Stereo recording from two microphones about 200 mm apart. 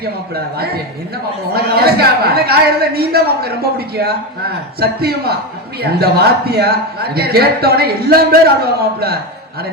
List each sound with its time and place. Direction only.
0.0 s a man's voice: 50° right (ahead or behind)